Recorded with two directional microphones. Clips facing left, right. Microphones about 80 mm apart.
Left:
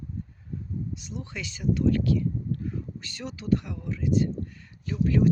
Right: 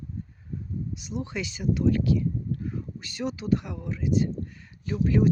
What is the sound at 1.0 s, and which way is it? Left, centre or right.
Speech, centre.